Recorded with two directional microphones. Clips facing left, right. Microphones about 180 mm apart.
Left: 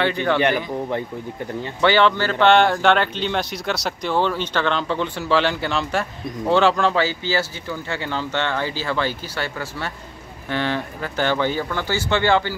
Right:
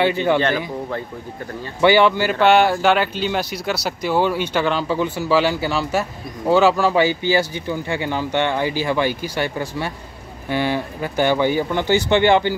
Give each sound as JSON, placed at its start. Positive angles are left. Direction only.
{"t": 0.0, "sound": "speech", "side_deg": -15}
{"t": 1.8, "sound": "speech", "side_deg": -10}